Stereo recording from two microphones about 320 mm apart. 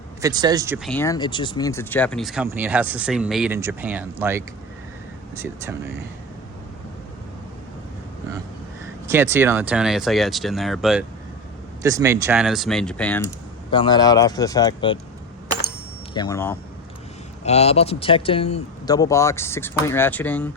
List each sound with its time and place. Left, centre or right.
0.2 s speech: centre
0.9 s speech: centre
9.0 s speech: centre
13.7 s speech: centre
16.1 s speech: centre
17.4 s speech: centre